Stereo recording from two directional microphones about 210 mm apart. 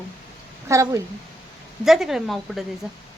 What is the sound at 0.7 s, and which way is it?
Speech, 15° right (ahead or behind).